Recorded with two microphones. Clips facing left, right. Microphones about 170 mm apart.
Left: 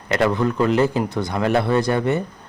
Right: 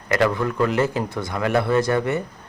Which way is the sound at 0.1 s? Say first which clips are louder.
Left 1 dB; 25° left (ahead or behind).